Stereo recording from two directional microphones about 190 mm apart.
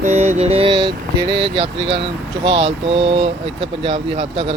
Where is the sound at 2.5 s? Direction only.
30° right (ahead or behind).